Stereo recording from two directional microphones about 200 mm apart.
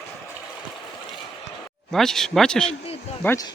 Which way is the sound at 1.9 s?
Centre (ahead or behind).